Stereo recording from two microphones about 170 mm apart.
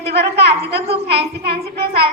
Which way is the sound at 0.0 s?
75° right (ahead or behind).